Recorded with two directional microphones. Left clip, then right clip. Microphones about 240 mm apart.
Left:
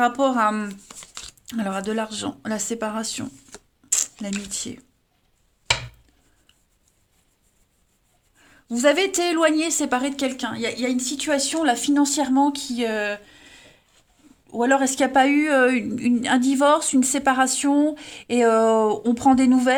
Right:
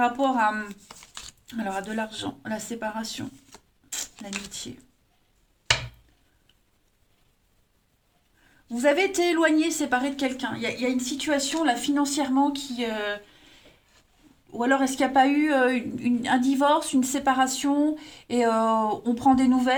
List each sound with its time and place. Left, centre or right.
0.0 s a woman's voice: left
3.8 s zipper: left
4.5 s a woman's voice: left
8.7 s a woman's voice: left